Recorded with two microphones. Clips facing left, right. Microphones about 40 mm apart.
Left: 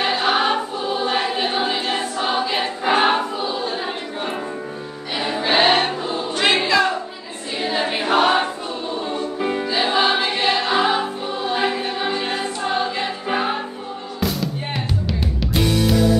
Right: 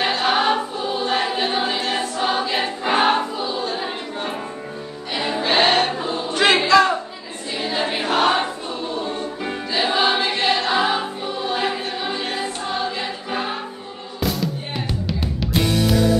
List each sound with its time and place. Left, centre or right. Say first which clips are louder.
0.0 s choir: even; centre
5.1 s music: even; centre
6.6 s a sound: right 3 dB; centre
7.6 s choir: left 1 dB; centre
9.0 s music: left 3 dB; centre
12.3 s choir: left 2 dB; left
15.0 s music: left 1 dB; centre